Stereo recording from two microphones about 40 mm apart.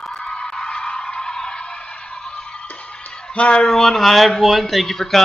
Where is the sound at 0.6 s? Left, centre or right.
Left.